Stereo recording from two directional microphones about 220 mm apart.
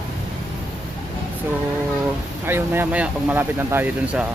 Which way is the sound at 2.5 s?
10° right (ahead or behind).